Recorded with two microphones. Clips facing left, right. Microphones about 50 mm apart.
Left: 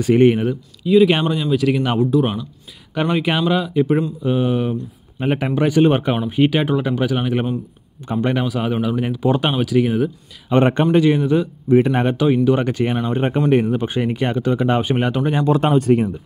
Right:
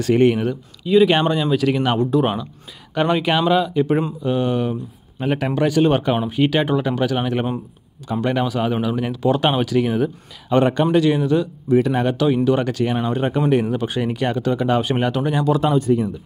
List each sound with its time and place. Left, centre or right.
0.0 s speech: centre
10.7 s speech: left
11.7 s speech: left
15.4 s speech: left
15.8 s speech: left